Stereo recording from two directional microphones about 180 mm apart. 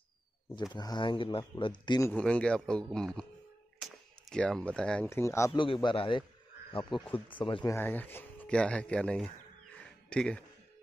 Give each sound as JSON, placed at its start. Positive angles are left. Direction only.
{"t": 0.7, "sound": "speech", "side_deg": 25}
{"t": 2.1, "sound": "speech", "side_deg": 5}
{"t": 5.5, "sound": "speech", "side_deg": 25}
{"t": 7.7, "sound": "speech", "side_deg": 10}